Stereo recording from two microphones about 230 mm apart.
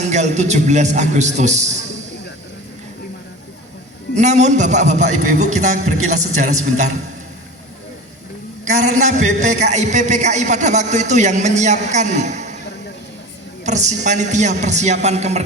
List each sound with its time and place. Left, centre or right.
0.0 s a man's voice: right
4.1 s a man's voice: right
8.8 s a man's voice: right
13.7 s a man's voice: right